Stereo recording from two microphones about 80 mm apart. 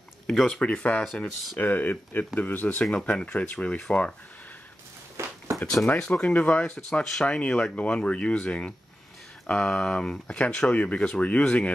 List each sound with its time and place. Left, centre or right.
0.3 s speech: centre
1.6 s speech: left
5.2 s a sound: right
5.9 s speech: centre